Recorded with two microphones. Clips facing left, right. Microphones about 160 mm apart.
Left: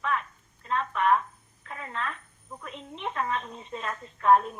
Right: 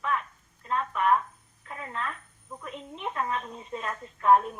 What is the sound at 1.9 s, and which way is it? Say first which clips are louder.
A woman's voice: left 1 dB; 5° right (ahead or behind).